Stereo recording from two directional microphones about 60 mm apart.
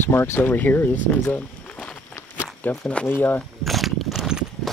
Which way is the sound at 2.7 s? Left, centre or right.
Left.